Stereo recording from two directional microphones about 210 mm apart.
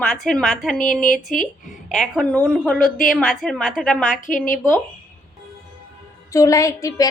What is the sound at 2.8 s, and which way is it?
Speech, 40° left (ahead or behind).